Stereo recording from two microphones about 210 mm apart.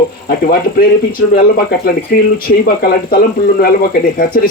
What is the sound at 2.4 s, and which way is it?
Speech, 45° left (ahead or behind).